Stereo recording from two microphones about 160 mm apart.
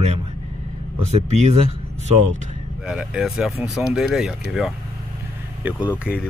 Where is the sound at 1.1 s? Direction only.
45° right (ahead or behind).